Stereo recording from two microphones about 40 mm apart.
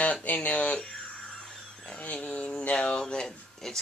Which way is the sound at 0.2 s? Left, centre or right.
Left.